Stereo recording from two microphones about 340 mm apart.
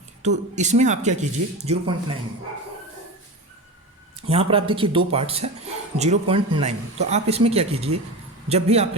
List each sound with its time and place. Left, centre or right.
0.2 s speech: right
4.3 s speech: centre